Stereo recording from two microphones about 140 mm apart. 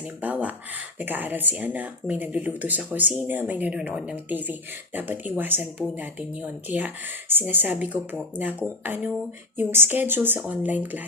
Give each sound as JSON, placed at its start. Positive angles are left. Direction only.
{"t": 0.2, "sound": "speech", "side_deg": -10}